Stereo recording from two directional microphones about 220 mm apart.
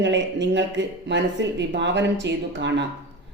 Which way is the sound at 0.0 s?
55° right (ahead or behind).